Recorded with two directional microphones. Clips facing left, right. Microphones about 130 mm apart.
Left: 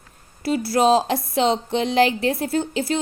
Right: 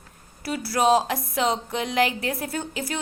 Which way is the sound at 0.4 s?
25° left (ahead or behind).